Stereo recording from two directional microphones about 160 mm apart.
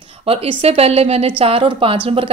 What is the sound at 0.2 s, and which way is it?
A woman's voice, 35° right (ahead or behind).